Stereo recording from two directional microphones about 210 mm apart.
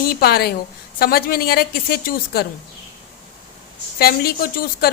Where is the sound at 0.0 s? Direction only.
45° left (ahead or behind).